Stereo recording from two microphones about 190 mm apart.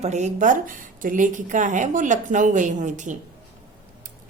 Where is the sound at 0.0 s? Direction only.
40° right (ahead or behind).